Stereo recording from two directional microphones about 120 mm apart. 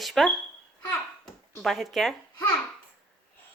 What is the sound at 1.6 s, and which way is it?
Speech, centre (ahead or behind).